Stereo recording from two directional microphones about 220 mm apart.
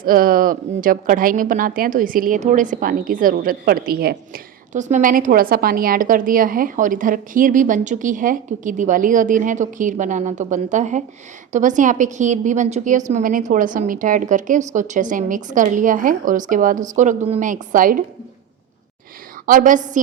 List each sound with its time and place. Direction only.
0.0 s a woman's voice: 40° right (ahead or behind)
19.5 s a woman's voice: 35° right (ahead or behind)